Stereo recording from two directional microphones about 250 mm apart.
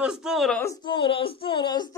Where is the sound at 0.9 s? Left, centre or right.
Centre.